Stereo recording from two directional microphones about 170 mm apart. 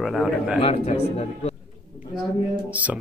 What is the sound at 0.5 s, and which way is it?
Speech, 35° left (ahead or behind).